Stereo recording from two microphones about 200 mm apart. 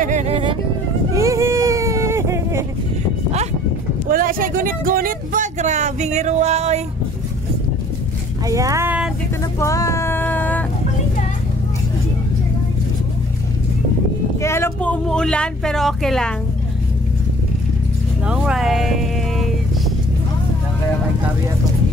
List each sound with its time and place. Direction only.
0.0 s music: 35° right (ahead or behind)
1.1 s a sound: 15° right (ahead or behind)
4.1 s speech: 45° right (ahead or behind)
8.5 s speech: 15° right (ahead or behind)
9.4 s vehicle: 15° left (ahead or behind)
14.4 s speech: 15° left (ahead or behind)
18.2 s music: 5° right (ahead or behind)